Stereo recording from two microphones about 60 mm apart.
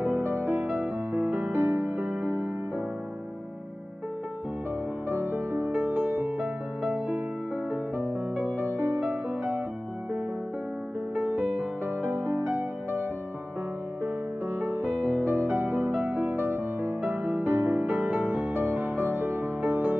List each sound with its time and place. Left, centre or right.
0.2 s music: right
5.1 s music: right
5.7 s music: right
11.1 s music: right
12.0 s music: right
14.6 s music: right
19.6 s music: right